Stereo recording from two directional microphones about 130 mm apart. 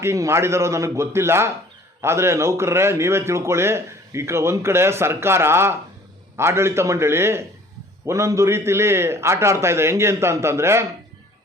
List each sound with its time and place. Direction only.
0.0 s a man's voice: 20° right (ahead or behind)